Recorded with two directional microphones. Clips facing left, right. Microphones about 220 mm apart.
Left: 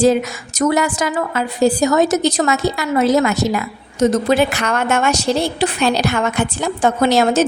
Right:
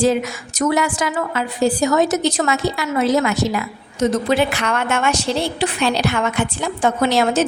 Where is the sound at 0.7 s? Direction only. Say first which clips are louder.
Even; 40° left (ahead or behind).